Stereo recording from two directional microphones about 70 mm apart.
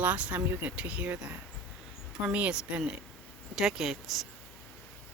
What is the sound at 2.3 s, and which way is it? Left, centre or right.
Speech, centre.